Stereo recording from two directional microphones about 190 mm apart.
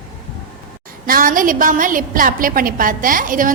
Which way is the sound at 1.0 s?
45° right (ahead or behind).